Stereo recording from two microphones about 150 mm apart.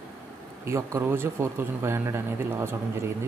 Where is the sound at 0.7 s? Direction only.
20° right (ahead or behind).